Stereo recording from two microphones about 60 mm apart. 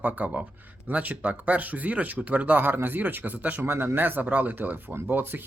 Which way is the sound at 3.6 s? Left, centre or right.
Right.